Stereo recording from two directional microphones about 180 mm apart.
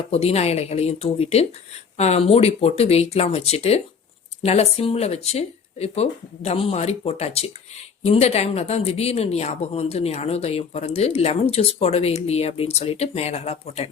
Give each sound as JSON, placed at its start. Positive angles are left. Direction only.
{"t": 0.1, "sound": "speech", "side_deg": 35}